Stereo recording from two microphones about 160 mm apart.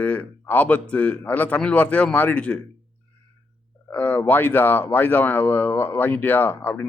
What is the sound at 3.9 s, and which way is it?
Speech, 10° left (ahead or behind).